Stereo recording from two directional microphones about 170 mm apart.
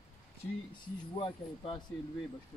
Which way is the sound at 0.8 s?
35° left (ahead or behind).